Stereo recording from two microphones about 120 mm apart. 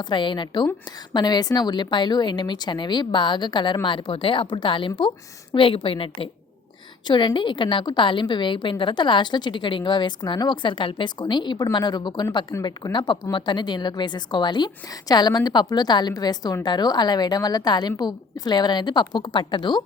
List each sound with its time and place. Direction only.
0.0 s a woman's voice: 40° left (ahead or behind)